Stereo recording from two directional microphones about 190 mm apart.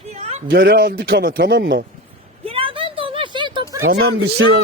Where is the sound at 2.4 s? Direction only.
30° right (ahead or behind).